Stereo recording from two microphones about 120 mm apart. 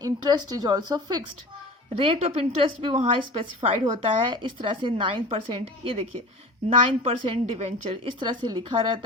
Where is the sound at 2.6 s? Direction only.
45° right (ahead or behind).